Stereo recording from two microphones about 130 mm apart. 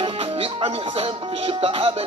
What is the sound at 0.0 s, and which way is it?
Music, 45° right (ahead or behind).